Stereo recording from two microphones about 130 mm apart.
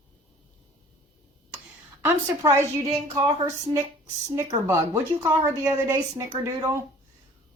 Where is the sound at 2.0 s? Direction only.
20° right (ahead or behind).